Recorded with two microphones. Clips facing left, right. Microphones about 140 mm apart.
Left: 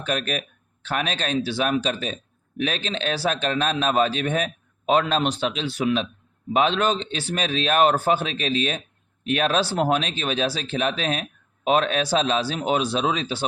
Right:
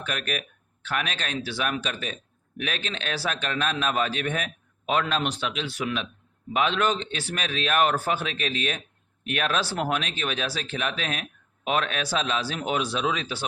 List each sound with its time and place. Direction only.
0.0 s speech: 30° left (ahead or behind)